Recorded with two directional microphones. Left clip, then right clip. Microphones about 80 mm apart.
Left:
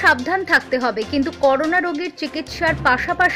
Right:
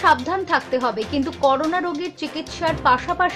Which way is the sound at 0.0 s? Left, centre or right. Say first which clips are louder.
Left 1 dB; left.